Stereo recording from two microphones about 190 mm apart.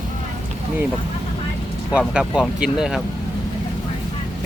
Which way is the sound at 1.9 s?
5° right (ahead or behind).